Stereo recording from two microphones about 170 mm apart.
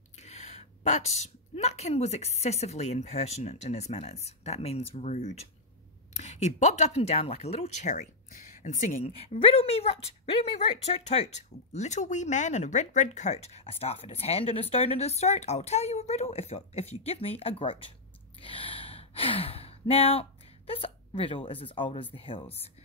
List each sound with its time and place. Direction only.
0.2 s speech: 40° left (ahead or behind)
9.0 s speech: 35° left (ahead or behind)
18.4 s gasp: 30° left (ahead or behind)
22.1 s speech: 30° left (ahead or behind)